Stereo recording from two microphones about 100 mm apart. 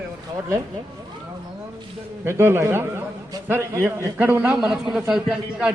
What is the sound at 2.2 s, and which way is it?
Speech, 25° right (ahead or behind).